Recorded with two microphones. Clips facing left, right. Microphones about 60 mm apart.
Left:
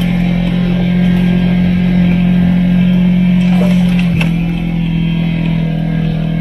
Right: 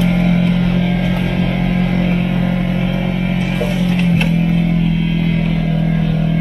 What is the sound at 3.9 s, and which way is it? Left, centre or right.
Music, centre.